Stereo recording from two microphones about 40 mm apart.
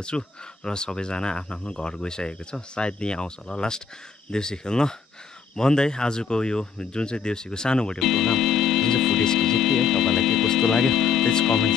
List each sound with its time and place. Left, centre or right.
0.1 s speech: left
8.0 s music: centre